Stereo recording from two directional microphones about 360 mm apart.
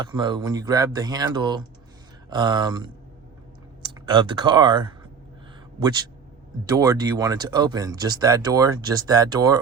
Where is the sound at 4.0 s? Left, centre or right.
Centre.